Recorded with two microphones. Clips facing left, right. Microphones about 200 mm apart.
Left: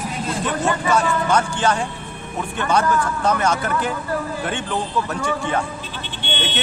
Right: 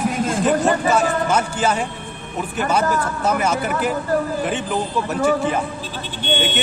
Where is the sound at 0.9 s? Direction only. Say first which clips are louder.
Even; 5° right (ahead or behind).